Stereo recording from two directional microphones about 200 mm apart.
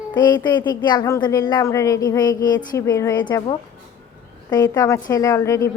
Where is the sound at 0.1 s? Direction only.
20° left (ahead or behind).